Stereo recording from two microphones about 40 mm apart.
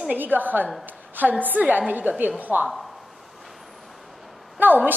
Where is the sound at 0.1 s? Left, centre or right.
Right.